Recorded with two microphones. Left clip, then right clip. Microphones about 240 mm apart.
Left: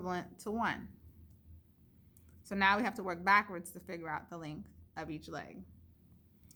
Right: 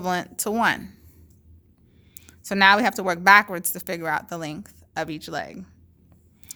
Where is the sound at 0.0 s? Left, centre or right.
Right.